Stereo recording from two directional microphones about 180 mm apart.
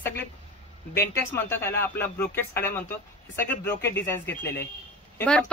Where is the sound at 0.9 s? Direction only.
15° left (ahead or behind).